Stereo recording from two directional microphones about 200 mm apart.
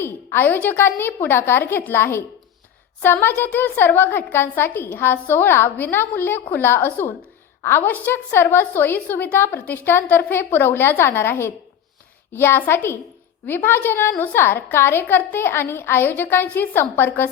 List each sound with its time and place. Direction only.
0.0 s a woman's voice: 10° left (ahead or behind)